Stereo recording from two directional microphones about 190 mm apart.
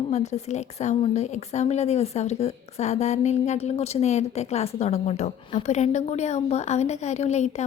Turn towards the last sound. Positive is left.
turn(degrees=35)  # may be behind; listen again after turning